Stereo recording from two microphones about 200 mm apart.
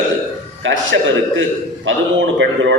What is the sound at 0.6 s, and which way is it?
Speech, 65° right (ahead or behind).